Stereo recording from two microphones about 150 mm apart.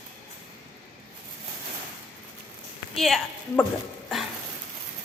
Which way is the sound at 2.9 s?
Centre (ahead or behind).